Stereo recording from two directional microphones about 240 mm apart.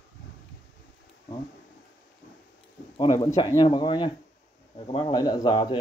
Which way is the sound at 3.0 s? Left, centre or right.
Centre.